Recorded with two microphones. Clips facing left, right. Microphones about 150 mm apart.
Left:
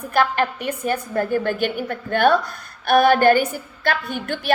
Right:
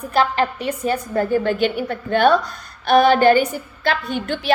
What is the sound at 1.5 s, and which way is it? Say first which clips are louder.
A woman's voice: right 3 dB; 50° left (ahead or behind).